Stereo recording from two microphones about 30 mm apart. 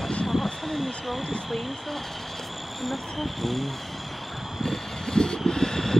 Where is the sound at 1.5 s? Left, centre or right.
Centre.